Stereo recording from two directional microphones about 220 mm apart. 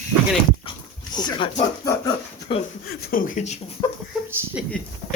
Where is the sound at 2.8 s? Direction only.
40° left (ahead or behind).